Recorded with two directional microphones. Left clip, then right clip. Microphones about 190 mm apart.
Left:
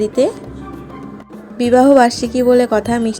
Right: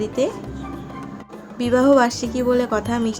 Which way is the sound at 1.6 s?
20° left (ahead or behind).